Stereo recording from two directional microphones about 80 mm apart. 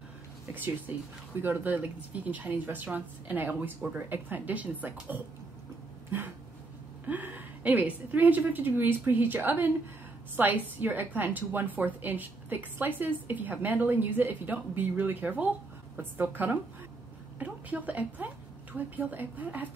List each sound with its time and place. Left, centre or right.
0.6 s a woman's voice: right
7.1 s a woman's voice: right